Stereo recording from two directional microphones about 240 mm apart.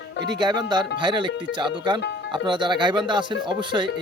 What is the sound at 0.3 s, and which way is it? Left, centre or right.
Speech, centre.